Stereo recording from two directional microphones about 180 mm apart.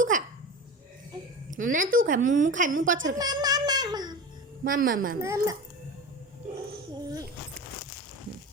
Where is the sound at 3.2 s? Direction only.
20° right (ahead or behind).